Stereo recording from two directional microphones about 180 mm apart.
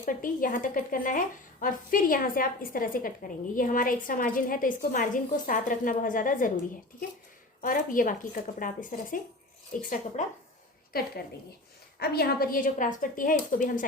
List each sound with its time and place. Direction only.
0.0 s a woman's voice: 50° left (ahead or behind)
7.6 s a woman's voice: 50° left (ahead or behind)
10.9 s a woman's voice: 55° left (ahead or behind)